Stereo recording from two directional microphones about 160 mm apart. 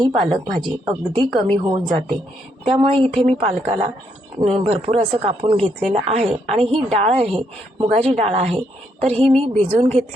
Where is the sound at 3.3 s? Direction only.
40° right (ahead or behind).